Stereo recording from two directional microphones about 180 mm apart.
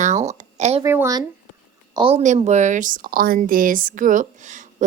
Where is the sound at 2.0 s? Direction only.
35° right (ahead or behind).